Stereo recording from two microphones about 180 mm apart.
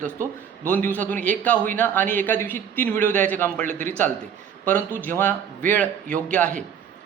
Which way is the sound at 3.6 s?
45° right (ahead or behind).